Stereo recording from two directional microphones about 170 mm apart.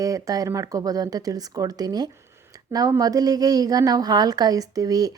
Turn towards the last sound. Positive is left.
turn(degrees=-20)  # may be behind; listen again after turning